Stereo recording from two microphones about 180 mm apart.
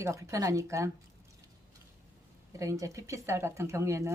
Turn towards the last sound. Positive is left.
turn(degrees=-15)  # may be behind; listen again after turning